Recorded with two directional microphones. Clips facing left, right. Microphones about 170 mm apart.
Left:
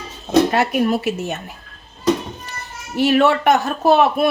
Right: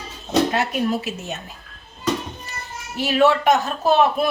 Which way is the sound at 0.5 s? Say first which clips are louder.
Left 4 dB; 60° left (ahead or behind).